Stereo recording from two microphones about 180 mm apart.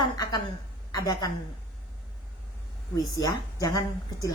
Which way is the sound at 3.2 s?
20° left (ahead or behind).